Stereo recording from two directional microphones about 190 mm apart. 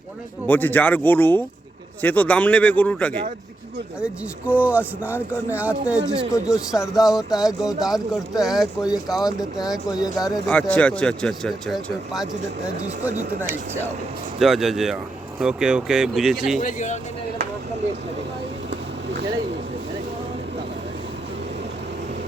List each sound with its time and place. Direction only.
0.4 s speech: 10° left (ahead or behind)
4.0 s a man's voice: 5° right (ahead or behind)
14.3 s a man's voice: centre (ahead or behind)
16.6 s speech: 40° left (ahead or behind)